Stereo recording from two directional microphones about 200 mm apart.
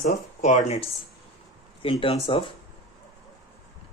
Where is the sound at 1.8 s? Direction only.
25° left (ahead or behind).